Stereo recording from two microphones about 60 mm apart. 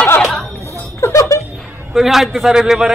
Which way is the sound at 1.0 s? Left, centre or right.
Left.